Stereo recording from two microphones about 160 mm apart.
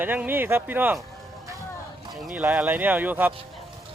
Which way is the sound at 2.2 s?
10° right (ahead or behind).